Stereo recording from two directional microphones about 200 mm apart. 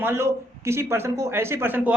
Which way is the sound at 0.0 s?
10° right (ahead or behind).